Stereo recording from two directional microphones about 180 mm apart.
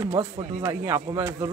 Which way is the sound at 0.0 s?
20° right (ahead or behind).